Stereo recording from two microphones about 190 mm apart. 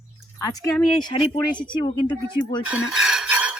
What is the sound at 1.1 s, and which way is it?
Speech, 25° left (ahead or behind).